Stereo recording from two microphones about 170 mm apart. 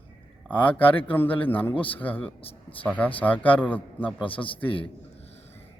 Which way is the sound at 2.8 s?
10° left (ahead or behind).